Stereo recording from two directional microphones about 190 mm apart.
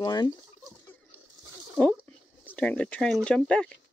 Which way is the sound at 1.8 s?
5° right (ahead or behind).